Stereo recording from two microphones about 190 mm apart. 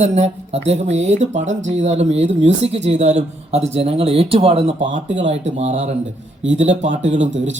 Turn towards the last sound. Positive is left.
turn(degrees=-40)  # may be behind; listen again after turning